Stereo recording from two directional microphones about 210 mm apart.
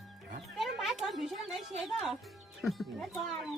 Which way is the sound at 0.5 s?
Centre (ahead or behind).